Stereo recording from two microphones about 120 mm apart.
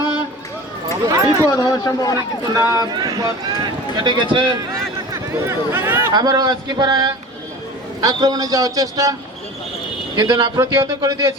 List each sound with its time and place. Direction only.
1.0 s speech: 25° right (ahead or behind)
1.5 s speech: 30° left (ahead or behind)
2.7 s speech: 35° right (ahead or behind)
5.1 s speech: 20° right (ahead or behind)
6.1 s speech: 30° right (ahead or behind)
10.2 s speech: 40° right (ahead or behind)
10.6 s speech: 25° right (ahead or behind)